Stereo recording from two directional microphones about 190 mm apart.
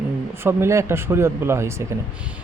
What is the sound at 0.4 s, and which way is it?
Speech, 15° right (ahead or behind).